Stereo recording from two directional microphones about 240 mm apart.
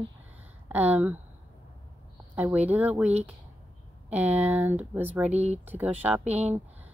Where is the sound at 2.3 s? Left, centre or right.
Centre.